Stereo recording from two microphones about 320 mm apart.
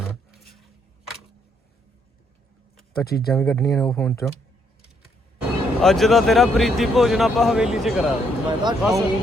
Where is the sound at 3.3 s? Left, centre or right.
Centre.